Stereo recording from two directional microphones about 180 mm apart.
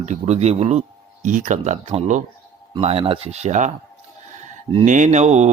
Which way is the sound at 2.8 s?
35° right (ahead or behind).